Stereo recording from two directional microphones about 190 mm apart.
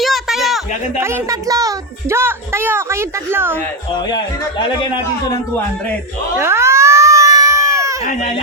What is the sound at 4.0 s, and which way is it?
Speech, 20° left (ahead or behind).